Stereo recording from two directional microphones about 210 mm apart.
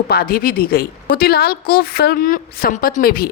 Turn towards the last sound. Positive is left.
turn(degrees=45)  # may be behind; listen again after turning